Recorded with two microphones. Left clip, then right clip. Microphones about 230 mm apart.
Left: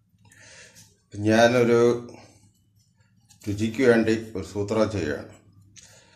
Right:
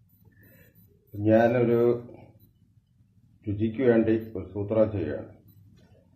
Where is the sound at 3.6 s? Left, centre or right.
Left.